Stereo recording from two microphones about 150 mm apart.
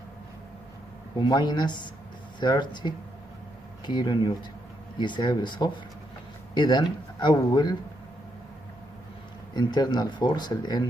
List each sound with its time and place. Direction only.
1.1 s speech: 30° left (ahead or behind)
9.5 s speech: 30° left (ahead or behind)